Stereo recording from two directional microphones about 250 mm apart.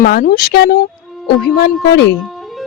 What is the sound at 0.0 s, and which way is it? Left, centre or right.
A woman's voice, left.